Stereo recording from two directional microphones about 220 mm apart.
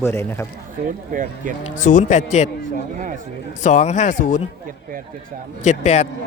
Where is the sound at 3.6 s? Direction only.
35° left (ahead or behind).